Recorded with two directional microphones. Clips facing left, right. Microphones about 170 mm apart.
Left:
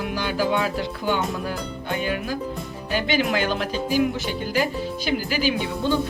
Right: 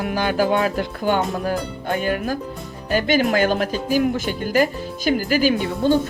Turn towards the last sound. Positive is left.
turn(degrees=-45)  # may be behind; listen again after turning